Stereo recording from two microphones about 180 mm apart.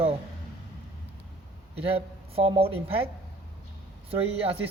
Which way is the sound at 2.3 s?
30° right (ahead or behind).